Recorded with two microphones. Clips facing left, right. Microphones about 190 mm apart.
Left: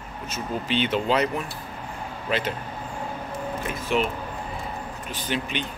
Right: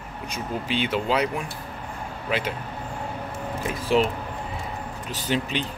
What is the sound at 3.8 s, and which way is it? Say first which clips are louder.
Speech: right 4 dB; 35° right (ahead or behind).